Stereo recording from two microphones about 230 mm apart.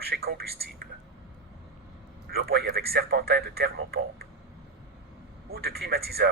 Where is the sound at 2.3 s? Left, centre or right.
Right.